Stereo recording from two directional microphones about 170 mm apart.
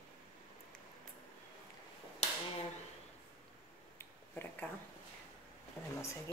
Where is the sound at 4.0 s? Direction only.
10° left (ahead or behind).